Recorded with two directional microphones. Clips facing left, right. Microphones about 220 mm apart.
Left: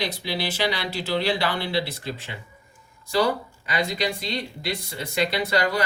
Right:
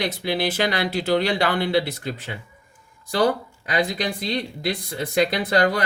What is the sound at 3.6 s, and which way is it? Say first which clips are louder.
Speech: right 2 dB; 45° right (ahead or behind).